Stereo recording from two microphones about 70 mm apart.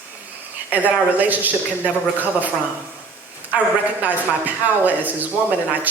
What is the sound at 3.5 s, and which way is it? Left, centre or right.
Speech, right.